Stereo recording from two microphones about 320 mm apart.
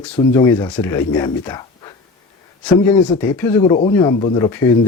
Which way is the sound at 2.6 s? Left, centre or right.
Centre.